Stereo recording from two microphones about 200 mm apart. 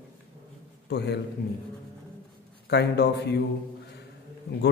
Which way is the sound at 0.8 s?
55° left (ahead or behind).